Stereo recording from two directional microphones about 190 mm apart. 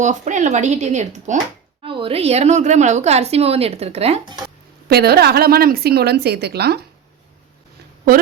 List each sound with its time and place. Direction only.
0.0 s a woman's voice: 40° right (ahead or behind)
4.9 s a woman's voice: 55° right (ahead or behind)